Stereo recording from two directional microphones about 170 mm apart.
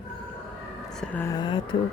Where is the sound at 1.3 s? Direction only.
25° left (ahead or behind).